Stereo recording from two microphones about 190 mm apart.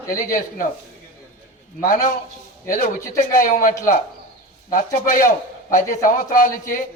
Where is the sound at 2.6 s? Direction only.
45° left (ahead or behind).